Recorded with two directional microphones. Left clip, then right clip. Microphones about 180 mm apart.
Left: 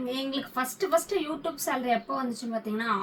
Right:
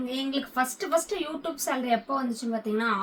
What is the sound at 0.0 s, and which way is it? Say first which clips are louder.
Speech: right 1 dB; 20° right (ahead or behind).